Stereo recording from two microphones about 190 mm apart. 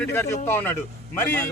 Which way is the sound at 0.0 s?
15° left (ahead or behind).